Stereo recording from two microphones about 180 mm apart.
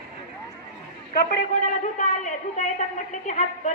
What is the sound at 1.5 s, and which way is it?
A man's voice, 45° left (ahead or behind).